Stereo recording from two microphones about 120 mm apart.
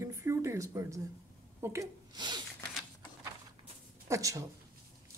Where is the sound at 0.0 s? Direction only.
25° right (ahead or behind).